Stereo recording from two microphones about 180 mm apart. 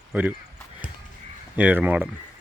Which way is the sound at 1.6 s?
10° right (ahead or behind).